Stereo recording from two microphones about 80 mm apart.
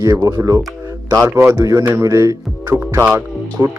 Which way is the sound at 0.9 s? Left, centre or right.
Right.